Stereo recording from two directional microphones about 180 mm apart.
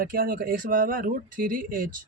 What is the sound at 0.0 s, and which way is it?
Speech, 50° right (ahead or behind).